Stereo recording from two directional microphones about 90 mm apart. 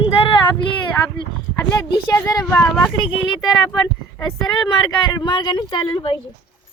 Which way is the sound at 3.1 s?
60° left (ahead or behind).